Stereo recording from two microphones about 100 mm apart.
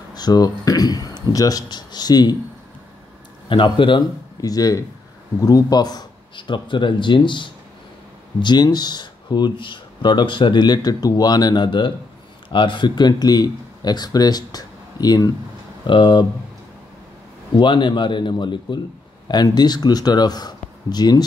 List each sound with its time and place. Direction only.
0.1 s speech: 40° left (ahead or behind)
3.4 s speech: 55° left (ahead or behind)
4.4 s speech: 40° left (ahead or behind)
15.9 s speech: 50° left (ahead or behind)
17.6 s speech: 50° left (ahead or behind)